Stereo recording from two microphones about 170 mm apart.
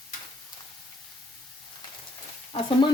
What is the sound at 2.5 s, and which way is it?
Sizzle, 35° left (ahead or behind).